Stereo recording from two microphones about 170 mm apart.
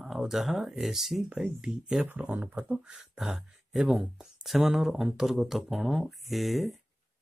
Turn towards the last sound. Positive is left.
turn(degrees=0)  # may be behind; listen again after turning